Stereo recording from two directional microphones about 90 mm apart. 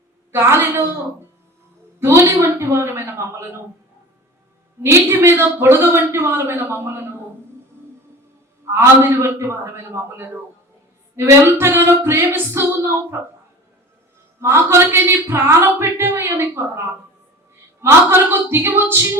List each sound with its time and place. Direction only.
0.3 s speech: 30° right (ahead or behind)
2.0 s speech: 30° right (ahead or behind)
4.8 s speech: 30° right (ahead or behind)
8.7 s speech: 30° right (ahead or behind)
14.4 s speech: 30° right (ahead or behind)